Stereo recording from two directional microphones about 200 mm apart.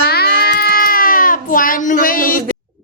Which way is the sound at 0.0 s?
50° left (ahead or behind).